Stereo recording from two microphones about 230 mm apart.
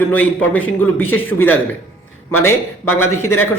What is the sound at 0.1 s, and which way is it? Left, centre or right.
A man's voice, centre.